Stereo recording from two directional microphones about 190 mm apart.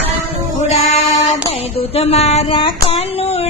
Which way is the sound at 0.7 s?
35° left (ahead or behind).